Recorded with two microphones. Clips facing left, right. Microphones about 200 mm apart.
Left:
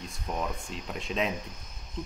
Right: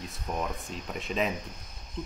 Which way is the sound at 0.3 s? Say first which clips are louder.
Even; centre (ahead or behind).